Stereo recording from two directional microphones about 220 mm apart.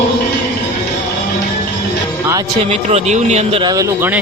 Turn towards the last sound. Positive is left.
turn(degrees=-10)  # may be behind; listen again after turning